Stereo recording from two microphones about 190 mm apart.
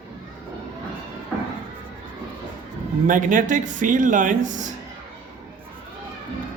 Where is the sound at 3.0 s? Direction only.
45° right (ahead or behind).